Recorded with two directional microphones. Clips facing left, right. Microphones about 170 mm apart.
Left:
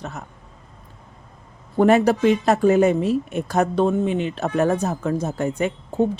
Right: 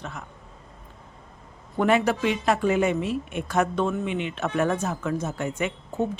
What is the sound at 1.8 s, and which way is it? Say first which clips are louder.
A woman's voice: left 6 dB; 40° left (ahead or behind).